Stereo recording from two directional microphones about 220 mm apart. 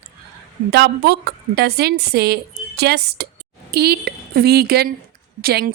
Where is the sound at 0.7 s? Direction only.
50° right (ahead or behind).